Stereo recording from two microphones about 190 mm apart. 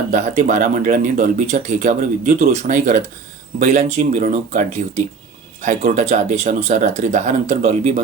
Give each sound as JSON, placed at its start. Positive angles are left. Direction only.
{"t": 0.1, "sound": "speech", "side_deg": -40}